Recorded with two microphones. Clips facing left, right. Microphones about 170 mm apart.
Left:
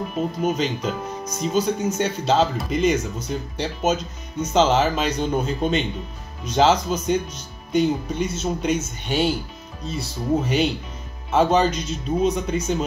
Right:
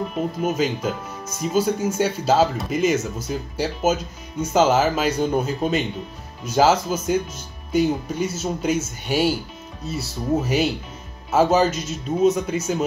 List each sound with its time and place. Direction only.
0.4 s speech: 10° right (ahead or behind)